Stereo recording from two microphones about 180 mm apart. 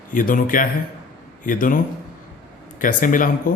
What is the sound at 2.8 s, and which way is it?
Speech, 50° left (ahead or behind).